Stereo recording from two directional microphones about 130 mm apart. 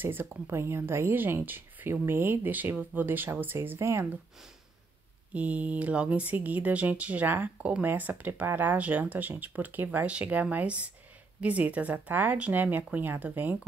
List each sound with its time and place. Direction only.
0.0 s speech: 15° right (ahead or behind)
5.3 s speech: 10° right (ahead or behind)